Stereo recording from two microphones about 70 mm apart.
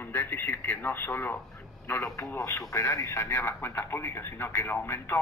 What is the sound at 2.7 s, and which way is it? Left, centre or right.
Speech, left.